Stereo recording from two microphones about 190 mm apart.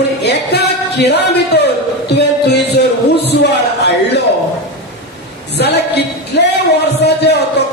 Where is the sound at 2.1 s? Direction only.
60° left (ahead or behind).